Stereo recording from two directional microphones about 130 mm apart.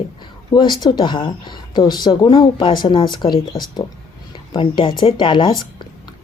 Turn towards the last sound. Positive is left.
turn(degrees=40)  # may be behind; listen again after turning